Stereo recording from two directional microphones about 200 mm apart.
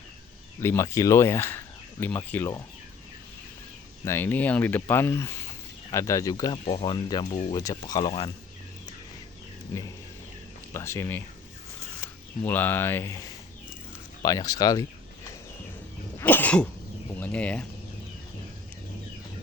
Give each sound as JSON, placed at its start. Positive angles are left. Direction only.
{"t": 0.6, "sound": "speech", "side_deg": 10}
{"t": 4.0, "sound": "speech", "side_deg": 10}
{"t": 9.7, "sound": "speech", "side_deg": 15}
{"t": 12.4, "sound": "speech", "side_deg": 10}
{"t": 16.1, "sound": "cough", "side_deg": 10}
{"t": 17.1, "sound": "speech", "side_deg": 10}